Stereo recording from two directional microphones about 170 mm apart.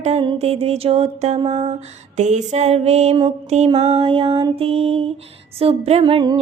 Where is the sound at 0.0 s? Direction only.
35° right (ahead or behind).